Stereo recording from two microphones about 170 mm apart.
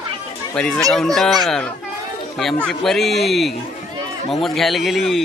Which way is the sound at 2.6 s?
Centre (ahead or behind).